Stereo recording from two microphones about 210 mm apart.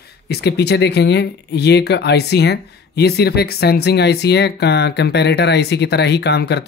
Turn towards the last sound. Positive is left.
turn(degrees=50)  # may be behind; listen again after turning